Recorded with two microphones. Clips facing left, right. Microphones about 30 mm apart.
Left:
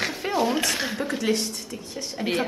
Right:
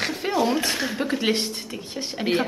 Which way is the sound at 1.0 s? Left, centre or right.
Right.